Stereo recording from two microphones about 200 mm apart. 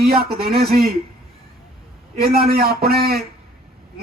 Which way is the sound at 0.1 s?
50° right (ahead or behind).